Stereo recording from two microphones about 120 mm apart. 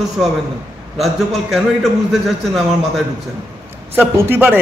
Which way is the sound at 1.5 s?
Centre (ahead or behind).